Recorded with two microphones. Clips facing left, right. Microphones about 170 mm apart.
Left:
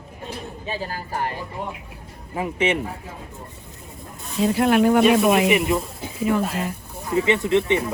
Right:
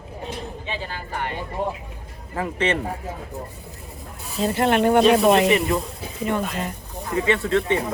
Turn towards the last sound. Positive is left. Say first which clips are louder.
# left 1 dB
turn(degrees=20)  # may be behind; listen again after turning